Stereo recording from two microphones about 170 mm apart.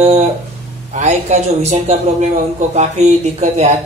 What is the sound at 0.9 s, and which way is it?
Speech, 45° right (ahead or behind).